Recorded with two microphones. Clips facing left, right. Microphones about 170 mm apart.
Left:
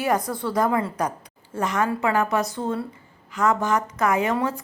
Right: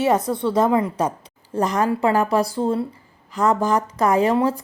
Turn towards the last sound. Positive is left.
turn(degrees=-35)  # may be behind; listen again after turning